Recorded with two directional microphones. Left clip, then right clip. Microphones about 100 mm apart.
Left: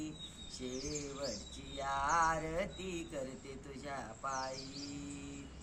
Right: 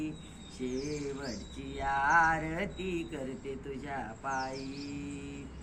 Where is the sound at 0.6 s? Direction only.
35° left (ahead or behind).